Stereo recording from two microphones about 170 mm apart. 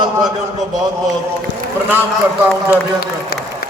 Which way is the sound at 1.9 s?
10° right (ahead or behind).